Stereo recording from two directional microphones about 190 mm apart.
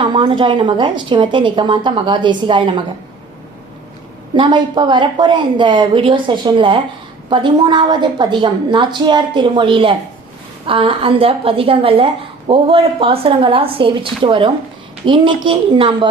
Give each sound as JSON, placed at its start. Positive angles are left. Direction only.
{"t": 0.0, "sound": "a woman's voice", "side_deg": -25}
{"t": 4.4, "sound": "a woman's voice", "side_deg": -25}